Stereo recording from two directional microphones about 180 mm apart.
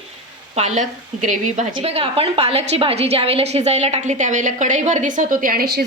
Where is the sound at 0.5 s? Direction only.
40° right (ahead or behind).